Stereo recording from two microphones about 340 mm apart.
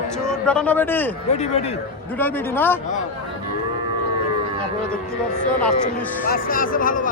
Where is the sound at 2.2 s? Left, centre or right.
Centre.